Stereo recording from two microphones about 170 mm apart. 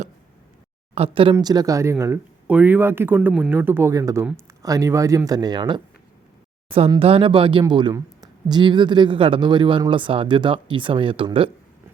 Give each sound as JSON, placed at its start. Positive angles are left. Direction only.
{"t": 0.9, "sound": "speech", "side_deg": -35}